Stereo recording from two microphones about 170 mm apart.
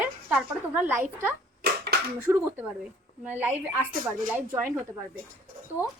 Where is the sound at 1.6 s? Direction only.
70° right (ahead or behind).